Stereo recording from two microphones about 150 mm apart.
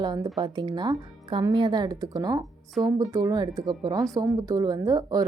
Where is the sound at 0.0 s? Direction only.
30° right (ahead or behind).